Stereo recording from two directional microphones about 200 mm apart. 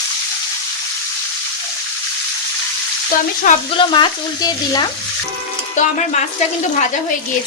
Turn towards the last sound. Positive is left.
turn(degrees=40)  # may be behind; listen again after turning